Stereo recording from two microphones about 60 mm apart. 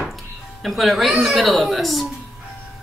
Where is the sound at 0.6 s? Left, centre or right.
Centre.